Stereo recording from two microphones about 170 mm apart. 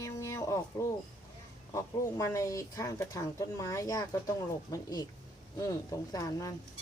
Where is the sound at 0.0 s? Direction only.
20° left (ahead or behind).